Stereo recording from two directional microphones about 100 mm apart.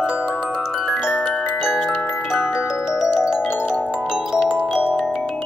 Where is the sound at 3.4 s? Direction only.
20° left (ahead or behind).